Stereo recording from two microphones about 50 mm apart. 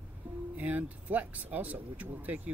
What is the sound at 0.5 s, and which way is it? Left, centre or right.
Speech, right.